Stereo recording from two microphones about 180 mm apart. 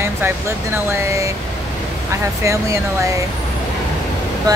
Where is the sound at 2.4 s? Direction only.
15° right (ahead or behind).